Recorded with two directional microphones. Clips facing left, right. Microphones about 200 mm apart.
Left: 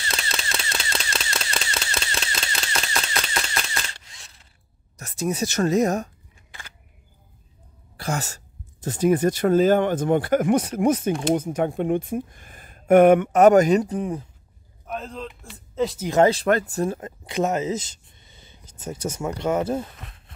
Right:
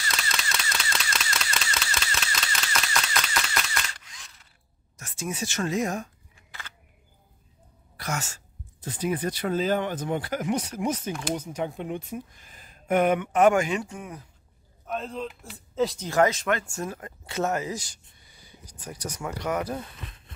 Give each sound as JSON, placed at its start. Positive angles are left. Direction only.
{"t": 0.0, "sound": "a sound", "side_deg": 30}
{"t": 4.9, "sound": "speech", "side_deg": 40}
{"t": 8.0, "sound": "speech", "side_deg": 35}
{"t": 8.8, "sound": "speech", "side_deg": 45}
{"t": 14.9, "sound": "speech", "side_deg": 0}
{"t": 16.1, "sound": "speech", "side_deg": 30}
{"t": 17.3, "sound": "speech", "side_deg": 20}